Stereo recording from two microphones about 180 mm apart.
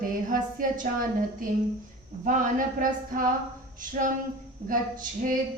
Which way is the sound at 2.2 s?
45° right (ahead or behind).